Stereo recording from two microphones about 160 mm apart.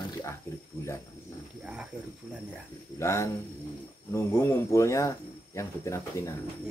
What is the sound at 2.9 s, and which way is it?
Speech, 15° left (ahead or behind).